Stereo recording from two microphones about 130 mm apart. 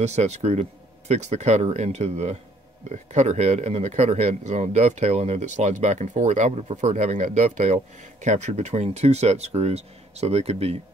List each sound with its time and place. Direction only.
0.0 s speech: 60° right (ahead or behind)